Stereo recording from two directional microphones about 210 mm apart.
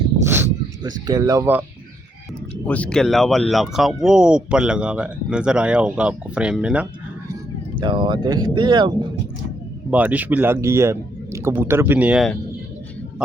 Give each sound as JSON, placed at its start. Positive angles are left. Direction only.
{"t": 0.3, "sound": "a sound", "side_deg": -10}
{"t": 2.6, "sound": "speech", "side_deg": 5}
{"t": 7.8, "sound": "speech", "side_deg": -20}
{"t": 9.9, "sound": "speech", "side_deg": -5}